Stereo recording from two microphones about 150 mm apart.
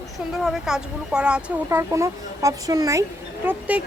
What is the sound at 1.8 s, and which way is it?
Speech, 20° right (ahead or behind).